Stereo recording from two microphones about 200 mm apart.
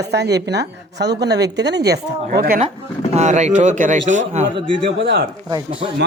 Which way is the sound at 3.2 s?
35° right (ahead or behind).